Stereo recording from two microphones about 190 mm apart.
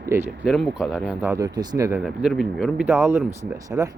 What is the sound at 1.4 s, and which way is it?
Speech, 15° right (ahead or behind).